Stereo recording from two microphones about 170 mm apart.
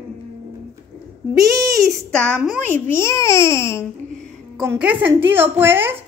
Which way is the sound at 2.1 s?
5° left (ahead or behind).